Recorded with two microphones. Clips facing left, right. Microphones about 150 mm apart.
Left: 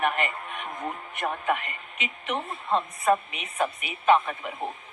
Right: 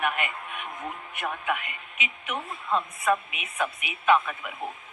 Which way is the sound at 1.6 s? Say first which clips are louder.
Even; 5° right (ahead or behind).